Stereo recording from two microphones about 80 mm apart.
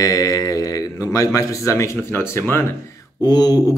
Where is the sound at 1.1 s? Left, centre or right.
Left.